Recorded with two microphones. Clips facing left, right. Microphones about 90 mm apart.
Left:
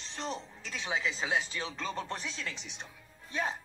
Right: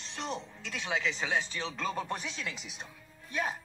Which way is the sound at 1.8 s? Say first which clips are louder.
Right 4 dB; 10° right (ahead or behind).